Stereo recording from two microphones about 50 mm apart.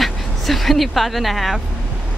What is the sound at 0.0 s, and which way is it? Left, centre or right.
Vehicle, centre.